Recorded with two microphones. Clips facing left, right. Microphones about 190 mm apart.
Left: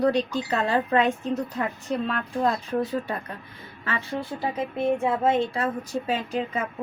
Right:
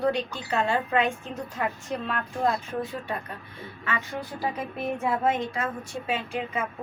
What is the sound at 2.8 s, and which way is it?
Speech, 40° left (ahead or behind).